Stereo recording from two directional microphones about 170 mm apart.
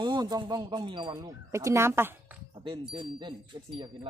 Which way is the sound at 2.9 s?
25° right (ahead or behind).